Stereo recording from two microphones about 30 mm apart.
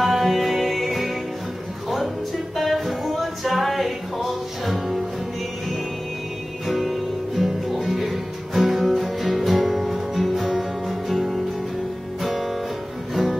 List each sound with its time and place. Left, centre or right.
0.0 s music: centre
2.5 s music: centre
6.8 s music: centre